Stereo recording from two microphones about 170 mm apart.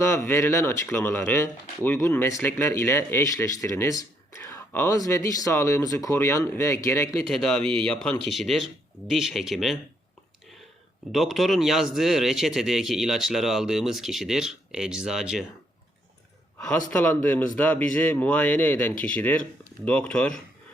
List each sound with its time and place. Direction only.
0.0 s speech: 15° left (ahead or behind)
7.3 s a man's voice: 5° left (ahead or behind)
11.1 s a man's voice: centre (ahead or behind)
16.9 s speech: 10° left (ahead or behind)